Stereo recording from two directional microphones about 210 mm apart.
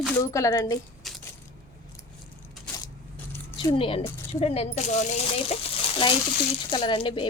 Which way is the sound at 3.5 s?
25° left (ahead or behind).